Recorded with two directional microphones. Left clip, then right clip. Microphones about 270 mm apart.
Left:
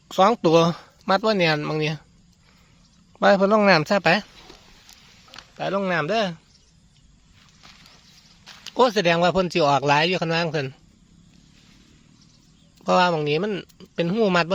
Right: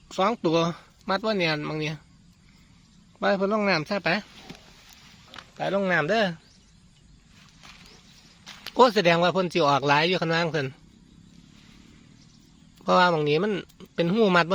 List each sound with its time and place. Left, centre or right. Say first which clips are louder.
0.1 s speech: left 7 dB; left
3.2 s speech: left 7 dB; left
5.5 s speech: left 1 dB; centre
8.4 s speech: even; centre
12.8 s speech: left 1 dB; centre